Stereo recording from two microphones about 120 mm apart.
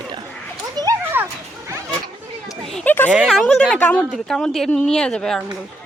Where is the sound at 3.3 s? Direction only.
Centre (ahead or behind).